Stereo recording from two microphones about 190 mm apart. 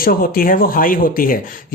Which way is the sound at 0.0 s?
50° left (ahead or behind).